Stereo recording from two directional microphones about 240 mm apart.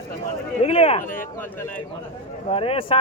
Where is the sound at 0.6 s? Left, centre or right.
Left.